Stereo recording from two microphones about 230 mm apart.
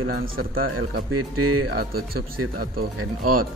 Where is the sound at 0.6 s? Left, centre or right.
Right.